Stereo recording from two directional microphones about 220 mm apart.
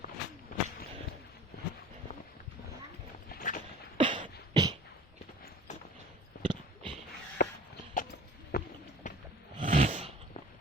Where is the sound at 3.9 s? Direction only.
25° right (ahead or behind).